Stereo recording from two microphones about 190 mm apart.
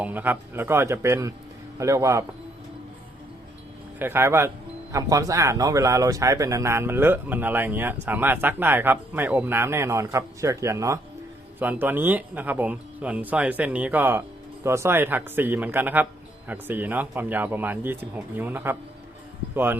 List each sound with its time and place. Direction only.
0.0 s speech: 10° right (ahead or behind)
3.9 s speech: 10° right (ahead or behind)